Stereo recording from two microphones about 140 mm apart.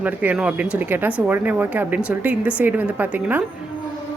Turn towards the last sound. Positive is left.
turn(degrees=-10)  # may be behind; listen again after turning